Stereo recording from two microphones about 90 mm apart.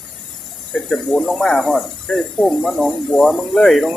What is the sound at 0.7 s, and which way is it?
Speech, 10° left (ahead or behind).